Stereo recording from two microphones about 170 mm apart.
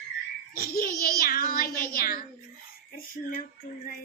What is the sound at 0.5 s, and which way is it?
A child's voice, 60° left (ahead or behind).